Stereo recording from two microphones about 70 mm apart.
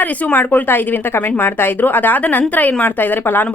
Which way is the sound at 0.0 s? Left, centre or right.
Left.